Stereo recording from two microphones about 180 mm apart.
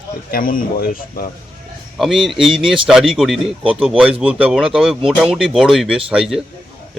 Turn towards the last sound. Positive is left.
turn(degrees=-5)  # may be behind; listen again after turning